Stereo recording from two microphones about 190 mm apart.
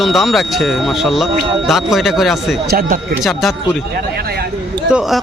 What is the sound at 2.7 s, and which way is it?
Speech, 50° right (ahead or behind).